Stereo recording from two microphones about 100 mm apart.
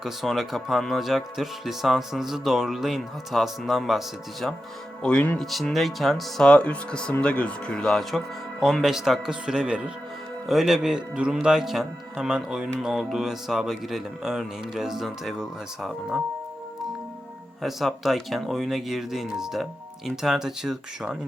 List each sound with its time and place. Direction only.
0.0 s speech: centre (ahead or behind)
5.0 s speech: 15° left (ahead or behind)
5.4 s speech: 5° left (ahead or behind)
8.6 s speech: 5° right (ahead or behind)
17.6 s speech: centre (ahead or behind)